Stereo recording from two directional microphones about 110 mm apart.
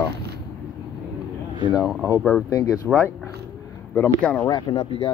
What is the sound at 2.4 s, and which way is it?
Speech, 30° left (ahead or behind).